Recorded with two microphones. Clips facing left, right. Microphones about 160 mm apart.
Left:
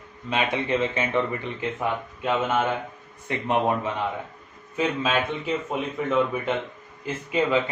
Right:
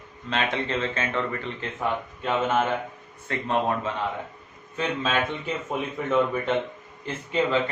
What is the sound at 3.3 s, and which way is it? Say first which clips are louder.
Speech: left 2 dB; 15° left (ahead or behind).